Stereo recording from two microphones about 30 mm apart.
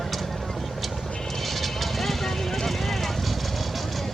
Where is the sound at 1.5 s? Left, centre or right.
Centre.